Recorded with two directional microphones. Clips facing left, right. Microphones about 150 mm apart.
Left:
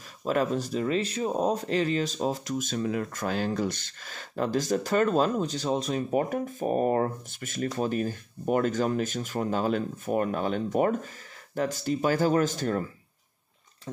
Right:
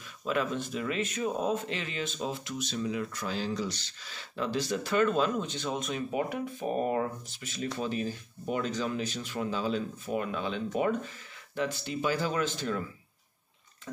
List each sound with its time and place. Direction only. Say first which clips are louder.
0.2 s speech: left 4 dB; 40° left (ahead or behind)